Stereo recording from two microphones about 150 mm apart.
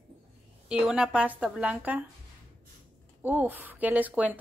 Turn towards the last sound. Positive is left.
turn(degrees=-10)  # may be behind; listen again after turning